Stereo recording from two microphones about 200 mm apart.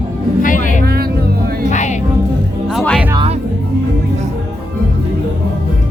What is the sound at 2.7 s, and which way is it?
Music, centre (ahead or behind).